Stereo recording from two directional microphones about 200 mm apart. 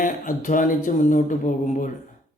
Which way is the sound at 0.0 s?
40° left (ahead or behind).